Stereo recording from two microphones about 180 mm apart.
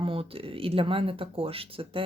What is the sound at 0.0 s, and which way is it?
Speech, 30° right (ahead or behind).